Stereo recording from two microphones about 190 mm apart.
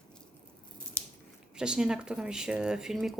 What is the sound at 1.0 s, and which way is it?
Scissors, 10° left (ahead or behind).